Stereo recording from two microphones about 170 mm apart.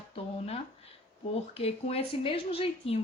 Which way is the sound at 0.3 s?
35° left (ahead or behind).